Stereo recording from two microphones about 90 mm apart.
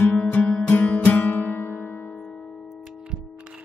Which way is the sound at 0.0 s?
15° left (ahead or behind).